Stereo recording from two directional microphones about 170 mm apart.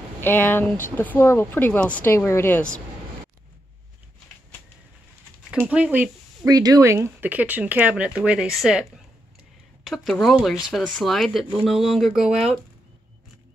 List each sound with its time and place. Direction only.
0.2 s speech: 10° left (ahead or behind)
5.5 s speech: 5° right (ahead or behind)
6.5 s speech: 20° right (ahead or behind); by 12.5 s centre (ahead or behind)